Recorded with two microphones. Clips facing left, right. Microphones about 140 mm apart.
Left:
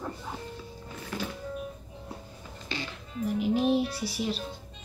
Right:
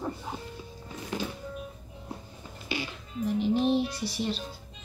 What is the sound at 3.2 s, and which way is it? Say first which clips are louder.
Music: even; 5° left (ahead or behind).